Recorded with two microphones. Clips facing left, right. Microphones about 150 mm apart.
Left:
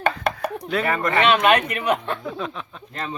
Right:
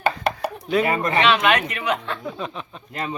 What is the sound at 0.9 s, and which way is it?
Speech, 15° right (ahead or behind).